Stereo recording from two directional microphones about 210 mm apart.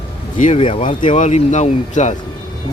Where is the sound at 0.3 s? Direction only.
30° left (ahead or behind).